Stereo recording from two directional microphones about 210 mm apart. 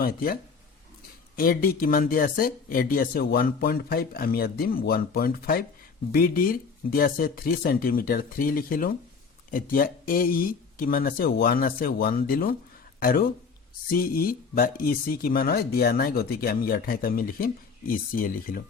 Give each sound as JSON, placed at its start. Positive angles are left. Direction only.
{"t": 0.0, "sound": "speech", "side_deg": 45}
{"t": 1.4, "sound": "speech", "side_deg": 45}